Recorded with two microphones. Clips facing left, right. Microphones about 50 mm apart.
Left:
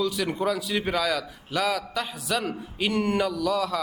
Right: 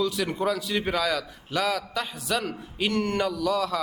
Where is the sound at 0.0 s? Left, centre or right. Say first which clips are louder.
Even; centre.